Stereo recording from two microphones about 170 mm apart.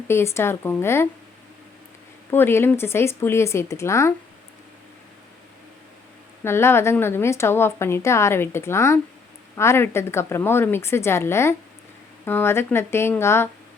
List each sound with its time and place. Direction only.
0.1 s a woman's voice: 15° left (ahead or behind)
2.3 s a woman's voice: 15° left (ahead or behind)
6.4 s a woman's voice: 15° left (ahead or behind)